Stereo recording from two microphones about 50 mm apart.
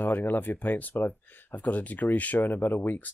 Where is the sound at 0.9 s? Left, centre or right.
Left.